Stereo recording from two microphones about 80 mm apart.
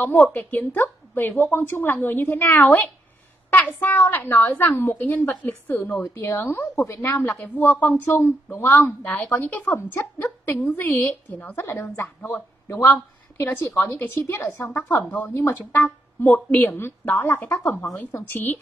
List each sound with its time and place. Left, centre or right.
0.3 s a woman's voice: left
6.0 s a woman's voice: left
12.2 s a woman's voice: centre
13.4 s a woman's voice: left